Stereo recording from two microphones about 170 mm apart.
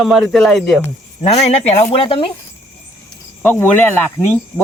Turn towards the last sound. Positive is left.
turn(degrees=15)  # may be behind; listen again after turning